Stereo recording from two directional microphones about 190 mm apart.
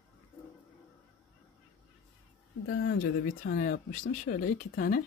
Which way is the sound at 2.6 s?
60° left (ahead or behind).